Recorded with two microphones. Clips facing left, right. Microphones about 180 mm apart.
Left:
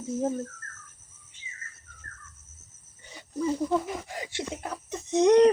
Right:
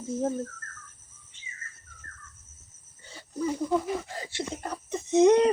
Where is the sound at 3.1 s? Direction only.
15° left (ahead or behind).